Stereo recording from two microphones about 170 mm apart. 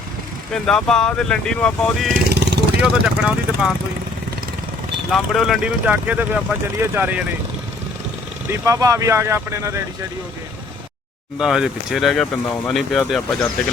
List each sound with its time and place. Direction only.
0.5 s speech: 5° left (ahead or behind)
2.1 s vehicle: 80° right
2.8 s speech: 5° right (ahead or behind)
5.3 s speech: centre (ahead or behind)
8.4 s speech: 20° right (ahead or behind)
11.3 s speech: 5° right (ahead or behind)